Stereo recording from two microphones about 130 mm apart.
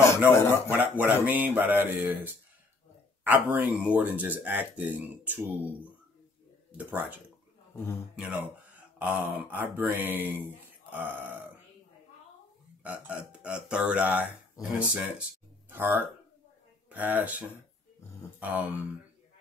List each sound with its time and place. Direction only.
0.2 s speech: 10° right (ahead or behind)
6.7 s speech: 10° right (ahead or behind)
8.2 s speech: 10° right (ahead or behind)
12.8 s speech: 10° right (ahead or behind)
18.4 s speech: 10° right (ahead or behind)